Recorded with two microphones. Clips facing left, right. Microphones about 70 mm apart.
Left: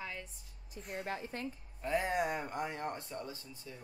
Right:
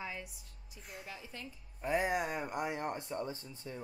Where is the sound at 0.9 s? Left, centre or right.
Left.